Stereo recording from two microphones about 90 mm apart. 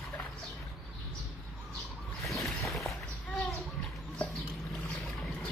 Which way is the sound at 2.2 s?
Centre (ahead or behind).